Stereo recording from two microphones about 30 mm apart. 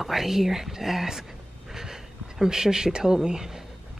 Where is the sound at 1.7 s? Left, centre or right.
Centre.